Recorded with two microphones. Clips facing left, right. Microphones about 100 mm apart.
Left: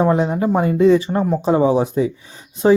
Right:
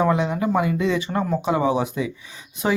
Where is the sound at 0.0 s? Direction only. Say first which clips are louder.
Left 4 dB; 35° left (ahead or behind).